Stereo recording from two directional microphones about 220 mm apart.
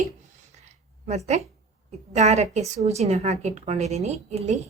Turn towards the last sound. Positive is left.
turn(degrees=-30)  # may be behind; listen again after turning